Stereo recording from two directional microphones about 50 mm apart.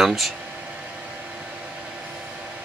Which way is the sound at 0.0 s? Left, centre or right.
Centre.